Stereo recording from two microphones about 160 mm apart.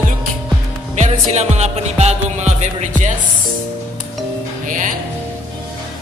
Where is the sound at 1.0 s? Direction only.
45° right (ahead or behind).